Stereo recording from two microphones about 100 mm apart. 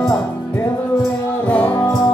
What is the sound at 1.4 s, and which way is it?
Music, 15° left (ahead or behind).